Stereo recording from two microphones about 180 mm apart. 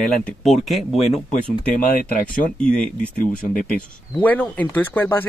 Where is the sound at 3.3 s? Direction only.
50° left (ahead or behind).